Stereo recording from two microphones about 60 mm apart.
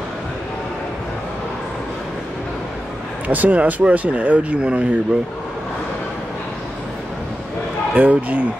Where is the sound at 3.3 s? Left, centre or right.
Right.